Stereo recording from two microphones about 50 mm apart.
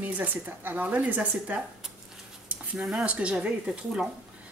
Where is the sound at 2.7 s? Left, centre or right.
Centre.